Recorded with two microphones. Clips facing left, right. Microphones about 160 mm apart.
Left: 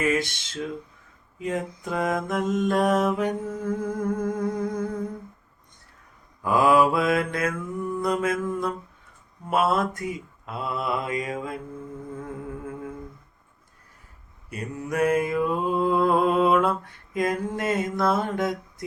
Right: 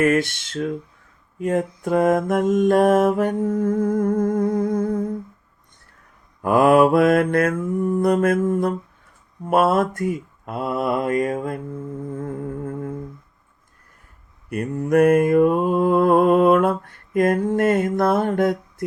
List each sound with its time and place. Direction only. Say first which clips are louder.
0.0 s mantra: right 6 dB; 55° right (ahead or behind)
6.4 s mantra: right 5 dB; 55° right (ahead or behind)
12.2 s music: right 7 dB; 45° right (ahead or behind)
14.5 s mantra: right 10 dB; 55° right (ahead or behind)